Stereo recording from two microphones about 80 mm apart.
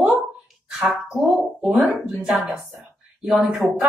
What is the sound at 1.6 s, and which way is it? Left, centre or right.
Speech, centre.